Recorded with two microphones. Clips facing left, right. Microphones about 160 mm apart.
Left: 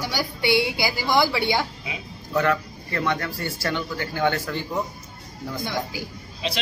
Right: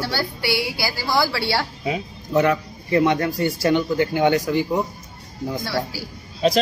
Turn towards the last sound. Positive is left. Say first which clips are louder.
# right 11 dB
turn(degrees=-45)  # may be behind; listen again after turning